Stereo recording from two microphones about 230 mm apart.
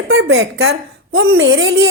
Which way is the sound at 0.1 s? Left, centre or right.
Right.